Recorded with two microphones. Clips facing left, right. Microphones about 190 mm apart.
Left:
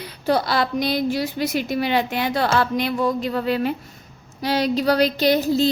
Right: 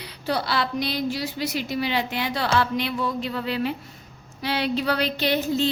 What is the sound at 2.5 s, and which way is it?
Speech, 45° left (ahead or behind).